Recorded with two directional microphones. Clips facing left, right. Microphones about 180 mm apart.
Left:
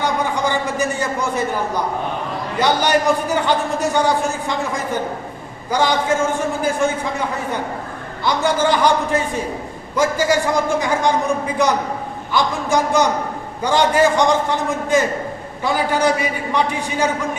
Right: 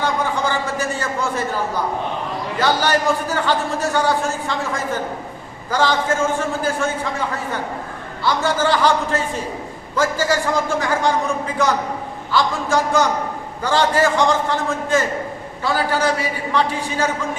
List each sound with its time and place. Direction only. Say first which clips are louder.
0.0 s a man's voice: left 1 dB; 15° left (ahead or behind)
5.7 s a man's voice: left 1 dB; 15° left (ahead or behind)
8.2 s a man's voice: left 1 dB; 15° left (ahead or behind)